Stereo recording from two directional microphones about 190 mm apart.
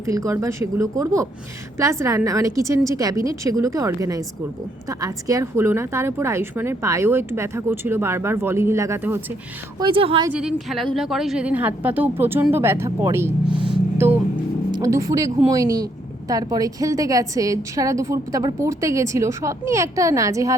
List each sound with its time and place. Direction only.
0.0 s speech: 15° right (ahead or behind)
9.7 s a woman's voice: 25° right (ahead or behind)
10.3 s a woman's voice: centre (ahead or behind)
13.5 s music: 25° right (ahead or behind)
14.7 s a woman's voice: 15° right (ahead or behind)